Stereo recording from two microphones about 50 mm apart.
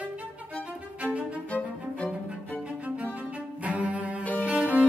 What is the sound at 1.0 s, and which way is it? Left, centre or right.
Music, right.